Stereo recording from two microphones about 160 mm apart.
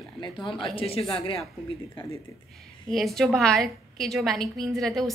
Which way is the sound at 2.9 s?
Centre (ahead or behind).